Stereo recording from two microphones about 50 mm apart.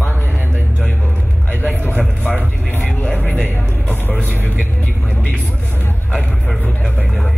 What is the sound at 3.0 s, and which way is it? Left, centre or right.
Music, left.